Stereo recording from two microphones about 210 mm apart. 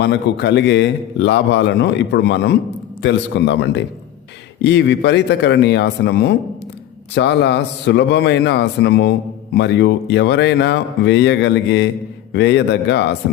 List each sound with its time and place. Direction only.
0.0 s a man's voice: 55° left (ahead or behind)